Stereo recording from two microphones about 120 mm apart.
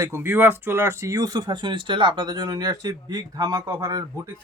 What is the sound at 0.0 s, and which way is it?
Speech, 20° right (ahead or behind).